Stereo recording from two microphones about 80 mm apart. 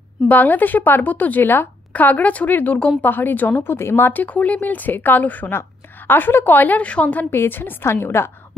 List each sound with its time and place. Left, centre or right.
0.3 s speech: left